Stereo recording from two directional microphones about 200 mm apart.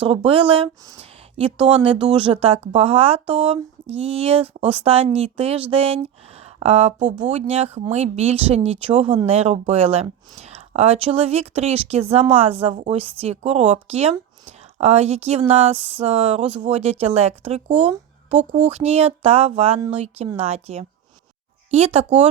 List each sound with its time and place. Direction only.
0.0 s speech: 25° right (ahead or behind)